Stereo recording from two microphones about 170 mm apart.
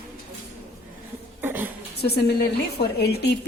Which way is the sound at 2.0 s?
70° left (ahead or behind).